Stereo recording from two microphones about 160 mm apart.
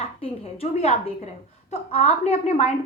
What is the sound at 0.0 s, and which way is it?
A woman's voice, 40° left (ahead or behind).